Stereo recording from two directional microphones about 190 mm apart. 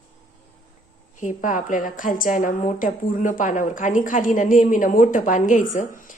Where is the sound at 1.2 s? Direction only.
45° left (ahead or behind).